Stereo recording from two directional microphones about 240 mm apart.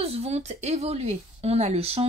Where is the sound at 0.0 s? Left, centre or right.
Right.